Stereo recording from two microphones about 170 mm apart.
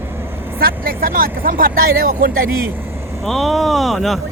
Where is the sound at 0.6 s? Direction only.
60° right (ahead or behind).